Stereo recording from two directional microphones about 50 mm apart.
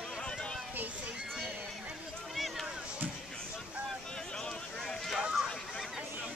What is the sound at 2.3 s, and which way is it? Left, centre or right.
Run, centre.